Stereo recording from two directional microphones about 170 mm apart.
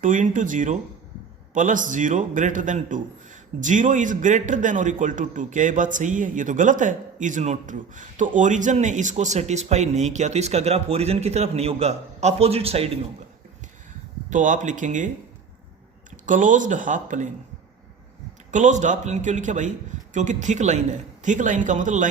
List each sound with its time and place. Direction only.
0.0 s a man's voice: 50° right (ahead or behind)
14.3 s a man's voice: 50° right (ahead or behind)
16.2 s a man's voice: 50° right (ahead or behind)
18.5 s a man's voice: 45° right (ahead or behind)